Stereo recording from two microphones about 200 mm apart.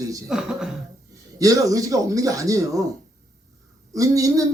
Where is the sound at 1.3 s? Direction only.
15° right (ahead or behind).